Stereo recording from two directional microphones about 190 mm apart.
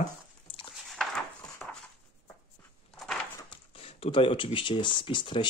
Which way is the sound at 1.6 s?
Centre (ahead or behind).